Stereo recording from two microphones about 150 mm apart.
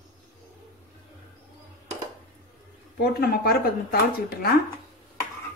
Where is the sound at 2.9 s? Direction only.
90° left.